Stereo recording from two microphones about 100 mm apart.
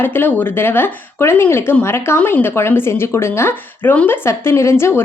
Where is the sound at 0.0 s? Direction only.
20° left (ahead or behind).